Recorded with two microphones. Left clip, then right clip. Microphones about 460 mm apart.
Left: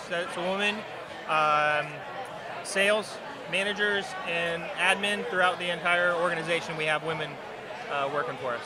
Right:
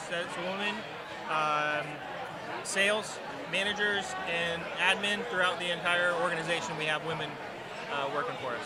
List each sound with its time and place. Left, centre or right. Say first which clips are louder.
0.1 s speech: left 5 dB; left